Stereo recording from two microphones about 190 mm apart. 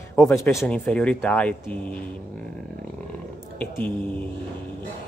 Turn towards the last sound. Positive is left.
turn(degrees=10)  # may be behind; listen again after turning